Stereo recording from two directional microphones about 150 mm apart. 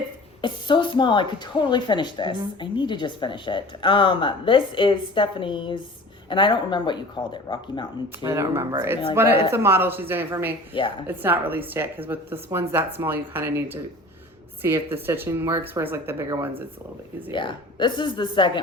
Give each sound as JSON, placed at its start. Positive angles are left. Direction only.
{"t": 0.4, "sound": "speech", "side_deg": 30}
{"t": 8.2, "sound": "speech", "side_deg": -20}
{"t": 10.8, "sound": "speech", "side_deg": 35}
{"t": 11.0, "sound": "speech", "side_deg": -15}
{"t": 17.3, "sound": "speech", "side_deg": 30}